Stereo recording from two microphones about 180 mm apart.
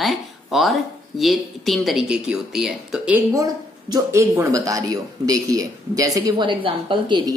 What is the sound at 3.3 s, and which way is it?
Speech, 20° right (ahead or behind).